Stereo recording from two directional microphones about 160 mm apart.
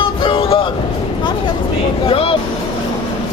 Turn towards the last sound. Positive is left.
turn(degrees=35)  # may be behind; listen again after turning